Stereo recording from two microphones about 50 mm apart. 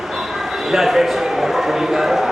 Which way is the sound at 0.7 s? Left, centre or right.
Centre.